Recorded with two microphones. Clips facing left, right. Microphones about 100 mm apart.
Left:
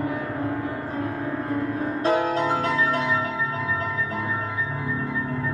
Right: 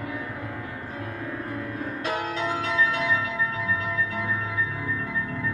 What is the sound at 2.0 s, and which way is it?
Change ringing, 35° left (ahead or behind).